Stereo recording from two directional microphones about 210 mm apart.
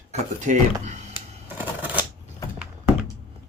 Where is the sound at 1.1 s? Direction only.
10° right (ahead or behind).